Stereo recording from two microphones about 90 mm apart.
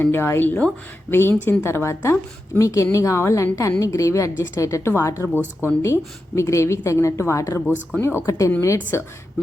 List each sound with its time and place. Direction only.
0.0 s a woman's voice: 25° left (ahead or behind)